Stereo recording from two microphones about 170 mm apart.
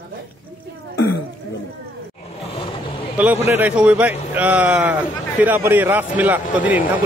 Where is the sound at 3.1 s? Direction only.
10° right (ahead or behind).